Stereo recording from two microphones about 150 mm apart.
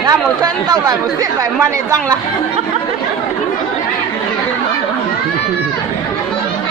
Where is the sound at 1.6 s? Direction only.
25° right (ahead or behind).